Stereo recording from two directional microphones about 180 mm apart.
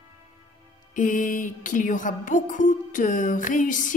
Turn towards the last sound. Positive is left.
turn(degrees=45)  # may be behind; listen again after turning